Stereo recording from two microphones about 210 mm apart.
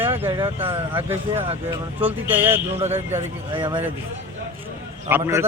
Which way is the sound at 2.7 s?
30° right (ahead or behind).